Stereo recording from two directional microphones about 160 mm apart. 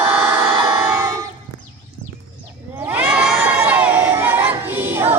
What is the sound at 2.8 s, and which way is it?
Children shouting, 10° right (ahead or behind).